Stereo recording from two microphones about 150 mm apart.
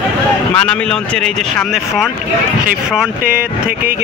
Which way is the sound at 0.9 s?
5° left (ahead or behind).